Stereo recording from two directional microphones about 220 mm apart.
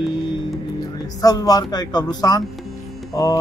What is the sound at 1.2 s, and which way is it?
A man's voice, 15° left (ahead or behind).